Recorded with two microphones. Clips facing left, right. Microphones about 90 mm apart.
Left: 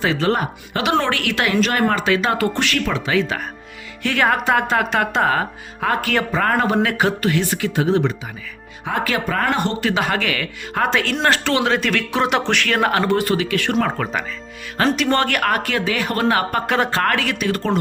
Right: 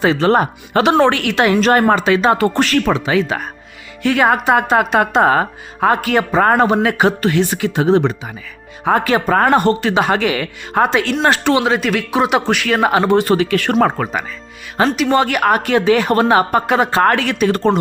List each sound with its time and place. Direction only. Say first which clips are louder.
0.0 s speech: right 6 dB; 30° right (ahead or behind)
2.6 s speech: right 6 dB; 35° right (ahead or behind)
2.9 s speech: right 4 dB; 20° right (ahead or behind)
5.2 s speech: right 5 dB; 30° right (ahead or behind)
6.0 s speech: right 5 dB; 20° right (ahead or behind); by 9.7 s 40° right (ahead or behind)
9.8 s speech: right 5 dB; 25° right (ahead or behind)
13.2 s speech: right 5 dB; 35° right (ahead or behind)
14.0 s speech: right 3 dB; 10° right (ahead or behind)
17.0 s speech: right 6 dB; 30° right (ahead or behind)